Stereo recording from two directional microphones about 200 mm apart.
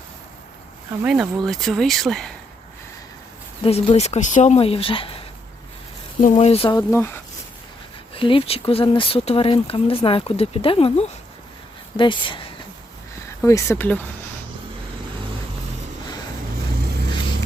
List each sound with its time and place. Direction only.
1.0 s speech: 5° right (ahead or behind)
3.6 s speech: 30° left (ahead or behind)
6.3 s speech: 30° left (ahead or behind)
6.9 s speech: 10° left (ahead or behind)
8.1 s speech: 25° left (ahead or behind); by 14.0 s 10° left (ahead or behind)